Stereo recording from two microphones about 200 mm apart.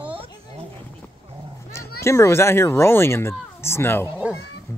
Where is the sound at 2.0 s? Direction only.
15° left (ahead or behind).